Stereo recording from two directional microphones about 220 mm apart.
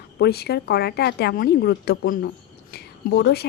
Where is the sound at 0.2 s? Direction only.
45° left (ahead or behind).